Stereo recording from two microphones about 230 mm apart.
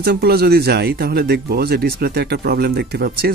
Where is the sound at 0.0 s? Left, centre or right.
Right.